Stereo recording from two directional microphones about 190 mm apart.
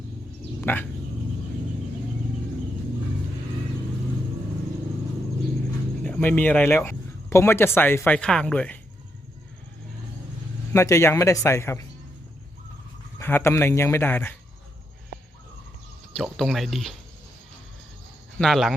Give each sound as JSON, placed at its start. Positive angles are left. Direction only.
{"t": 0.6, "sound": "a sound", "side_deg": 10}
{"t": 6.0, "sound": "speech", "side_deg": 5}
{"t": 10.7, "sound": "speech", "side_deg": 15}
{"t": 13.1, "sound": "speech", "side_deg": 10}
{"t": 16.1, "sound": "speech", "side_deg": 0}
{"t": 18.3, "sound": "speech", "side_deg": 0}